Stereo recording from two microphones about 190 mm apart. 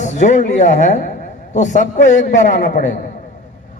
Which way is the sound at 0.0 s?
40° left (ahead or behind).